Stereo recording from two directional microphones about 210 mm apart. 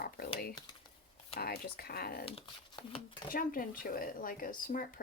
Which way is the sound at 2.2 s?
25° left (ahead or behind).